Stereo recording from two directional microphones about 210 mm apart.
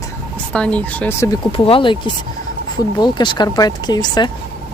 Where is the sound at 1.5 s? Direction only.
25° left (ahead or behind).